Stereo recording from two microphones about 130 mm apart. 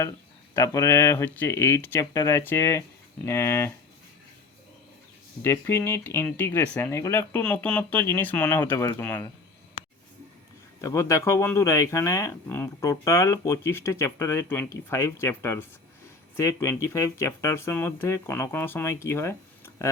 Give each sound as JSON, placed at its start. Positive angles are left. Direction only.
{"t": 0.5, "sound": "speech", "side_deg": 25}
{"t": 5.4, "sound": "speech", "side_deg": 20}
{"t": 7.4, "sound": "speech", "side_deg": 10}
{"t": 10.8, "sound": "speech", "side_deg": 25}